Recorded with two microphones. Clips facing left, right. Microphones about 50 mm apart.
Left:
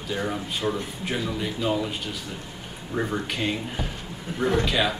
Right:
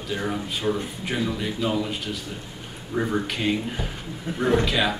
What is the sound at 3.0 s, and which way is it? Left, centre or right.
Speech, centre.